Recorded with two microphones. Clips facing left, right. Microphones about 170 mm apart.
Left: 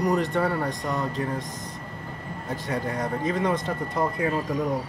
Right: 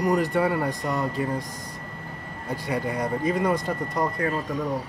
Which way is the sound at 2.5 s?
Centre (ahead or behind).